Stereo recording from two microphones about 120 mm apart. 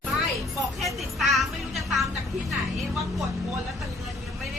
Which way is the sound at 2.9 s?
Centre (ahead or behind).